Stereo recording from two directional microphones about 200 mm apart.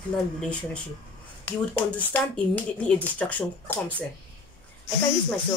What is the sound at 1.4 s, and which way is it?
Speech, 10° left (ahead or behind).